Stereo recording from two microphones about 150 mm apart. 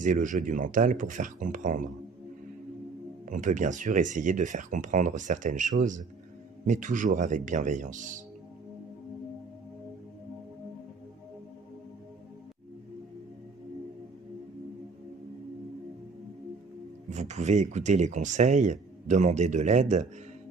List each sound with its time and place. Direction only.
0.0 s speech: 55° right (ahead or behind)
3.3 s speech: 55° right (ahead or behind)
17.1 s speech: 50° right (ahead or behind)